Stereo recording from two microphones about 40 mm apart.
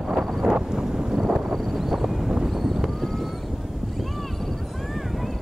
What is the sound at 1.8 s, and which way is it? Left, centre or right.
Vehicle, centre.